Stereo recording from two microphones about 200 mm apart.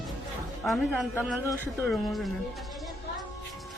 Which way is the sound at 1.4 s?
10° left (ahead or behind).